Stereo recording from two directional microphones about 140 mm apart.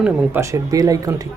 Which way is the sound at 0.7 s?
25° right (ahead or behind).